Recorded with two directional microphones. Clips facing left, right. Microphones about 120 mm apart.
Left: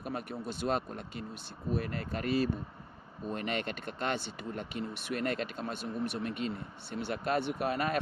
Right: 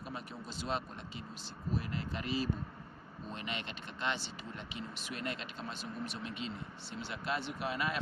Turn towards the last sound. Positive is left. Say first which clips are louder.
# left 5 dB
turn(degrees=50)  # may be behind; listen again after turning